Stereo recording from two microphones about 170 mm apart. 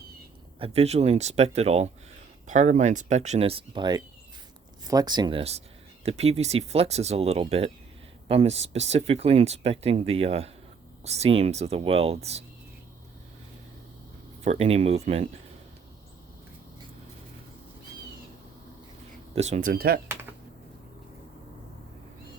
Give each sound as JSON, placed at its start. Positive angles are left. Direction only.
{"t": 0.6, "sound": "speech", "side_deg": -40}
{"t": 14.4, "sound": "speech", "side_deg": -40}
{"t": 19.4, "sound": "speech", "side_deg": -45}